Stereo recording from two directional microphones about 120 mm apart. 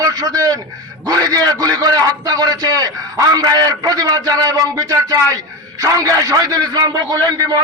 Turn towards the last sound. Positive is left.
turn(degrees=-30)  # may be behind; listen again after turning